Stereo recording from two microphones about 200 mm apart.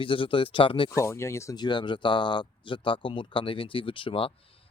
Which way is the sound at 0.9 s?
15° left (ahead or behind).